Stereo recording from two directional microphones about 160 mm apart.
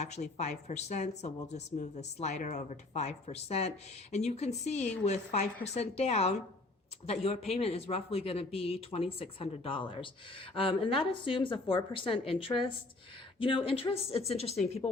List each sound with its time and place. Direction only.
0.0 s a woman's voice: 45° left (ahead or behind)